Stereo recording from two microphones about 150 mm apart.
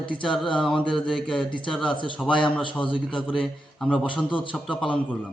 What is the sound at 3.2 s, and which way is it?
A man's voice, 5° left (ahead or behind).